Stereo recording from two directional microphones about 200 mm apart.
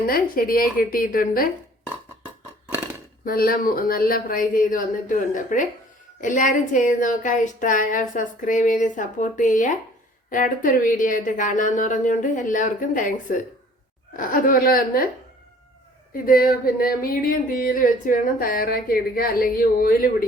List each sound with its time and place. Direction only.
0.1 s speech: 45° left (ahead or behind)
3.2 s a woman's voice: 45° left (ahead or behind)
16.1 s speech: 45° left (ahead or behind)